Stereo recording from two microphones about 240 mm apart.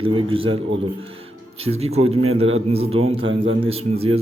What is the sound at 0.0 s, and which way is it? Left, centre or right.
Speech, right.